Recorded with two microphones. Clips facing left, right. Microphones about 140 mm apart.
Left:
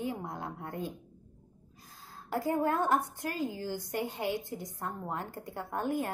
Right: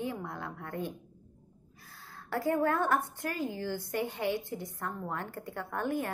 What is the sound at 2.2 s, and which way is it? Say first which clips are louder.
A woman's voice: right 1 dB; 15° left (ahead or behind).